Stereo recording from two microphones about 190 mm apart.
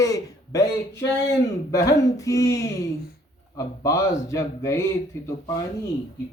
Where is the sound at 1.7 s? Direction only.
15° left (ahead or behind).